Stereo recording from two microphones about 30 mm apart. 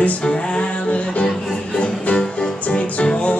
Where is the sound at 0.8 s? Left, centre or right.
Left.